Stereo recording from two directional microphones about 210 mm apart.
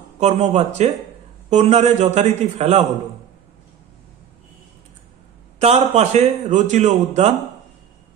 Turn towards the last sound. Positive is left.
turn(degrees=-30)  # may be behind; listen again after turning